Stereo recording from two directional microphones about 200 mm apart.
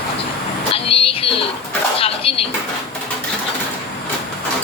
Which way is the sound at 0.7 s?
30° left (ahead or behind).